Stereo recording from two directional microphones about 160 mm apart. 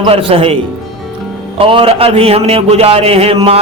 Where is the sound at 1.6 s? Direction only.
35° right (ahead or behind).